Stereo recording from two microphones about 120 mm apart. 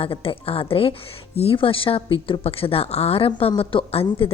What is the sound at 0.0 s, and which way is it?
A woman's voice, 50° left (ahead or behind).